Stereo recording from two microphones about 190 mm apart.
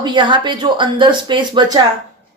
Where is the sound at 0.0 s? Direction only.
25° right (ahead or behind).